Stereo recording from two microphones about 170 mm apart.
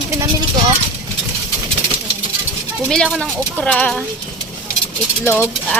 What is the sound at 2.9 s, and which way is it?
Speech, 5° left (ahead or behind).